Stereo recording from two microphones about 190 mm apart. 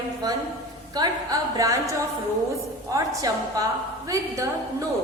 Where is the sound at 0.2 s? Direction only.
20° right (ahead or behind).